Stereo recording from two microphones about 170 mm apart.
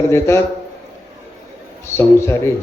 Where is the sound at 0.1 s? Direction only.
15° left (ahead or behind).